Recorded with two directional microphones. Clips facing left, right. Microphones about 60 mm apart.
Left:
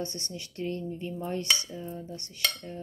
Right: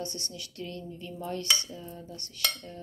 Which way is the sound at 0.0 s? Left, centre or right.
Left.